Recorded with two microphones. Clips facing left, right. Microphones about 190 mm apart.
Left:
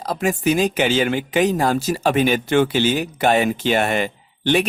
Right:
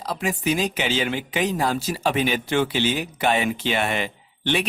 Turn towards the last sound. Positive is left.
turn(degrees=45)  # may be behind; listen again after turning